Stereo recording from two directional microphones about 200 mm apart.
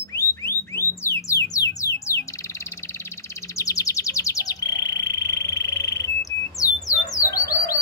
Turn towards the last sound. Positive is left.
turn(degrees=15)  # may be behind; listen again after turning